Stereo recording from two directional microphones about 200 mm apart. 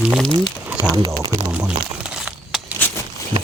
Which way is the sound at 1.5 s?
5° right (ahead or behind).